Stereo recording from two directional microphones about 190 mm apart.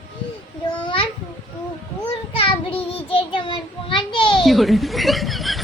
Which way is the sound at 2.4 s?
30° left (ahead or behind).